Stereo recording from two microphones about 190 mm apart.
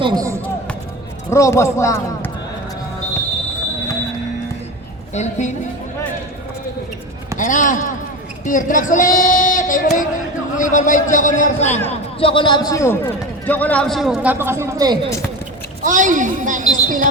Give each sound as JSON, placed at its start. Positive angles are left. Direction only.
{"t": 0.0, "sound": "speech", "side_deg": -20}
{"t": 1.3, "sound": "a man's voice", "side_deg": 15}
{"t": 5.1, "sound": "a woman's voice", "side_deg": 35}
{"t": 7.3, "sound": "speech", "side_deg": 40}
{"t": 8.4, "sound": "a sound", "side_deg": 45}
{"t": 10.6, "sound": "a man's voice", "side_deg": 40}
{"t": 15.8, "sound": "a woman's voice", "side_deg": -45}